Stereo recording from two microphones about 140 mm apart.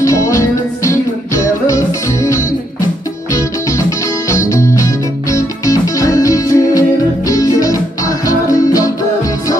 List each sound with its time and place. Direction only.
0.0 s music: 20° left (ahead or behind)
4.3 s music: 20° left (ahead or behind)